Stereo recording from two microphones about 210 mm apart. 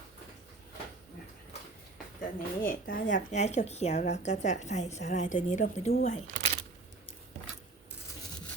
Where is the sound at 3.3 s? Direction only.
30° left (ahead or behind).